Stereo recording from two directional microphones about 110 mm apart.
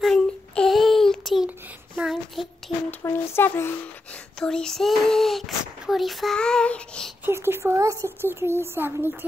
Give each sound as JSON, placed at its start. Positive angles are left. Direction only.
{"t": 0.0, "sound": "child singing", "side_deg": 5}
{"t": 3.0, "sound": "a sound", "side_deg": 25}
{"t": 4.1, "sound": "child singing", "side_deg": 5}
{"t": 5.9, "sound": "a child's voice", "side_deg": 0}
{"t": 7.2, "sound": "speech", "side_deg": -20}